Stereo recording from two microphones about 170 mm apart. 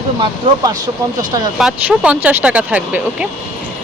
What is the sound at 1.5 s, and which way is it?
Speech, 5° right (ahead or behind).